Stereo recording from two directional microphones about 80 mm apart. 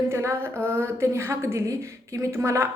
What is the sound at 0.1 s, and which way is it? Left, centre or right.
Female singing, right.